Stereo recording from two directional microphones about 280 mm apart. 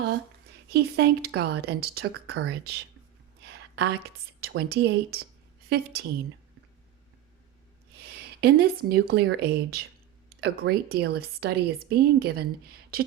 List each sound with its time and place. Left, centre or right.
0.7 s a woman's voice: right
7.9 s speech: right